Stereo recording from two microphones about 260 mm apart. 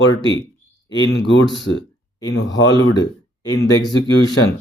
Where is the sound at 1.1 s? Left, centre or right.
Left.